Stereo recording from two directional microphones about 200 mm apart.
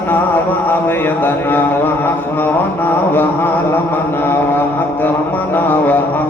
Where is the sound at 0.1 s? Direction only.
10° left (ahead or behind).